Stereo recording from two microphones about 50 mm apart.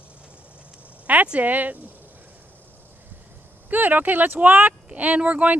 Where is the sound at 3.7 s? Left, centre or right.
Right.